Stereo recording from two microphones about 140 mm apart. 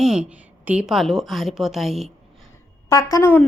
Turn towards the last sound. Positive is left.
turn(degrees=20)  # may be behind; listen again after turning